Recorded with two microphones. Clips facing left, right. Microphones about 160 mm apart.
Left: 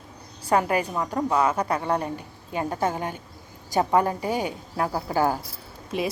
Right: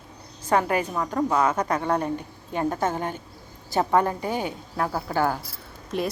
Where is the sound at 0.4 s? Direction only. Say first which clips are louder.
Even; 10° left (ahead or behind).